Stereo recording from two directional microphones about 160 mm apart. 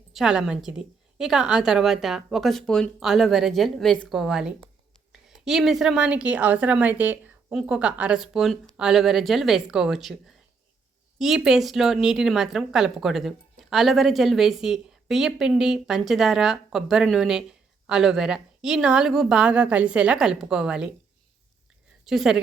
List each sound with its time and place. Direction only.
0.1 s speech: centre (ahead or behind)
22.0 s speech: centre (ahead or behind)